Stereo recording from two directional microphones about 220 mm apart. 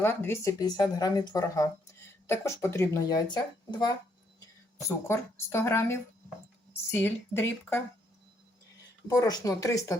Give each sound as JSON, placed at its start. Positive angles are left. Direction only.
{"t": 0.0, "sound": "speech", "side_deg": 10}
{"t": 9.0, "sound": "speech", "side_deg": 15}